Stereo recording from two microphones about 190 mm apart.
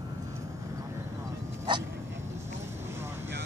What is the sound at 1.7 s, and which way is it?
Dog, 25° right (ahead or behind).